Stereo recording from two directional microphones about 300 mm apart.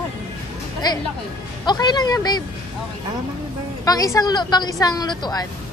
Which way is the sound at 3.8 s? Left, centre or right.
Centre.